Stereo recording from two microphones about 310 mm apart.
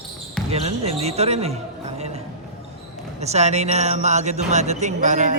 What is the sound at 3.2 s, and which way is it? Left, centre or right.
Speech, right.